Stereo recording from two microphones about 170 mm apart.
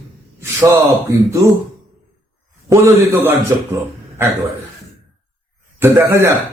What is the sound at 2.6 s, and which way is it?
Speech, 15° right (ahead or behind).